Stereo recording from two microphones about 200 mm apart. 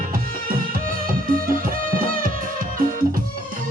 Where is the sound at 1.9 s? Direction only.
45° right (ahead or behind).